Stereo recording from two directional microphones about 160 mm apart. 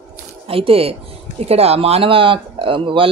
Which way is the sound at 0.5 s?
35° right (ahead or behind).